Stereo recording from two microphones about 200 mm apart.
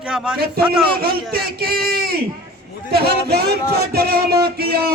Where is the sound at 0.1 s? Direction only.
5° right (ahead or behind).